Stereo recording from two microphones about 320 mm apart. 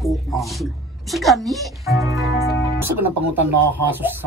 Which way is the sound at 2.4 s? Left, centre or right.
Centre.